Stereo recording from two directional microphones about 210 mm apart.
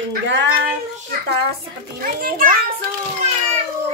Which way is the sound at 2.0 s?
45° right (ahead or behind).